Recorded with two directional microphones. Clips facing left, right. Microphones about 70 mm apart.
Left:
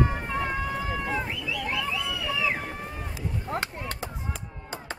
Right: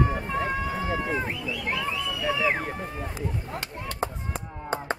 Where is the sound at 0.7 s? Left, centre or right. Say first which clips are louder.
Right 2 dB; centre.